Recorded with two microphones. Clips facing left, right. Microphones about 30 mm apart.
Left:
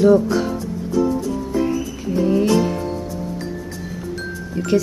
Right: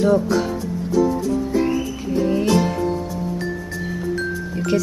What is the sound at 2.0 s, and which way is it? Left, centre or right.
Speech, centre.